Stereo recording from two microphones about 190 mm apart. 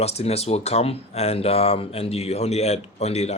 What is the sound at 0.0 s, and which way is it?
Speech, 35° left (ahead or behind).